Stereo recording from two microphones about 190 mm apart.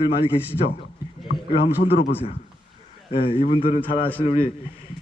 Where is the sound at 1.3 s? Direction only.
60° left (ahead or behind).